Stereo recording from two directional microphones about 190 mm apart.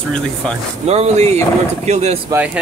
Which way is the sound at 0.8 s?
35° right (ahead or behind).